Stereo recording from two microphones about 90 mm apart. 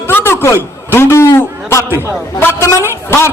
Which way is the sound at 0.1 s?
25° left (ahead or behind).